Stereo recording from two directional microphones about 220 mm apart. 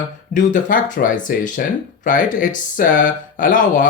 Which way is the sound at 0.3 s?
35° left (ahead or behind).